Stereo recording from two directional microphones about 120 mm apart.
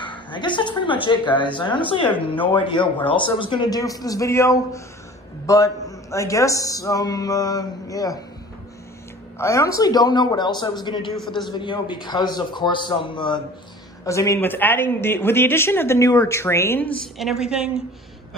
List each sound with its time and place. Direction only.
0.3 s a woman's voice: 40° left (ahead or behind)
9.4 s a man's voice: 25° left (ahead or behind); by 13.4 s 40° left (ahead or behind)
14.0 s a man's voice: 25° left (ahead or behind)
17.2 s a woman's voice: 5° right (ahead or behind)